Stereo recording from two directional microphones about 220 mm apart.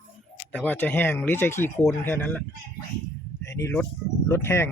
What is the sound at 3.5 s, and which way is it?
Speech, 10° left (ahead or behind).